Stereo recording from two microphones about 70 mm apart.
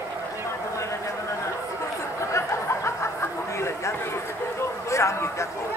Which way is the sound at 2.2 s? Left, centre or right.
Left.